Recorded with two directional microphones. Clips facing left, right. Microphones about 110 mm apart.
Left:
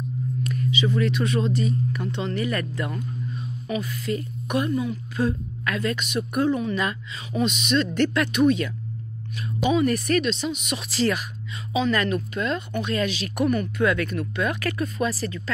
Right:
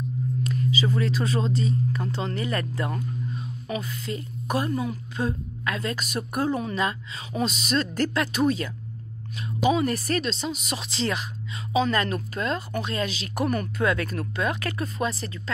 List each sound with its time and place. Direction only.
0.4 s a woman's voice: 30° right (ahead or behind)